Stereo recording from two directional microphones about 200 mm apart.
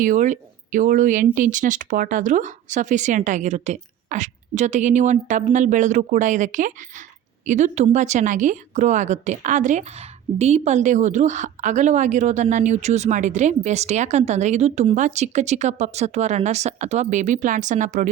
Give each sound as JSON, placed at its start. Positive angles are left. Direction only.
{"t": 0.0, "sound": "a woman's voice", "side_deg": -40}